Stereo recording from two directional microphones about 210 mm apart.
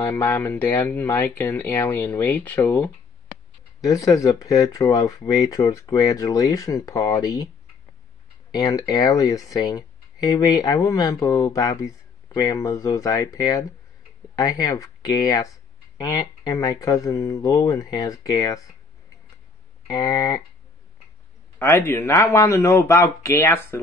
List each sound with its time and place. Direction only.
0.0 s speech: 10° left (ahead or behind)
8.5 s speech: 20° left (ahead or behind)
19.9 s speech: 20° left (ahead or behind)
21.5 s speech: 10° left (ahead or behind)